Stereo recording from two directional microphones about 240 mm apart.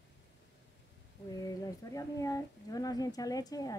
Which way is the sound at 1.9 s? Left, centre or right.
Centre.